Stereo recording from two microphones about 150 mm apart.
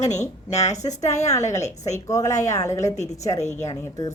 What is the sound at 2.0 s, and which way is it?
Speech, 20° left (ahead or behind).